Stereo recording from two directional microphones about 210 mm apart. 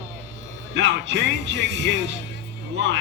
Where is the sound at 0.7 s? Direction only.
55° right (ahead or behind).